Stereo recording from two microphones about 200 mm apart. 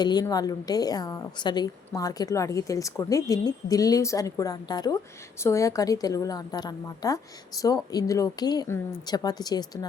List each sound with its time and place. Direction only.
0.0 s a woman's voice: 20° left (ahead or behind)